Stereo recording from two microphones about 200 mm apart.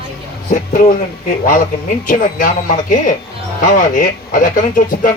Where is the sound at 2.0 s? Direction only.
40° left (ahead or behind).